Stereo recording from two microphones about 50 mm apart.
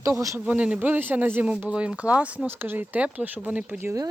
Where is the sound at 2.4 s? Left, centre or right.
Right.